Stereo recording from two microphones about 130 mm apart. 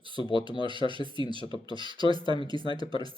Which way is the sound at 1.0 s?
35° left (ahead or behind).